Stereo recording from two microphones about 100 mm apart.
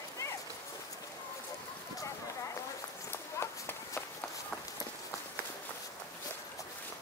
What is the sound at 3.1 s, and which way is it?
Run, 25° left (ahead or behind).